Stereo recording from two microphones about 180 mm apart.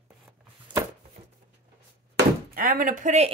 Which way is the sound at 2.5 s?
50° right (ahead or behind).